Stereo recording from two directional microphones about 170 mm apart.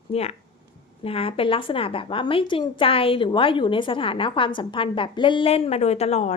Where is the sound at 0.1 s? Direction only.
40° left (ahead or behind).